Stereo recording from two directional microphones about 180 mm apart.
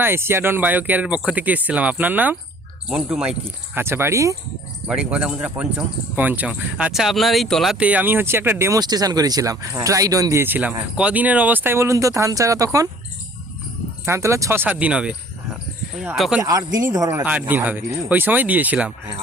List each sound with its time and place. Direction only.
0.0 s speech: 10° right (ahead or behind)
4.9 s speech: 5° right (ahead or behind)
14.0 s speech: 15° right (ahead or behind)
16.4 s speech: 20° right (ahead or behind)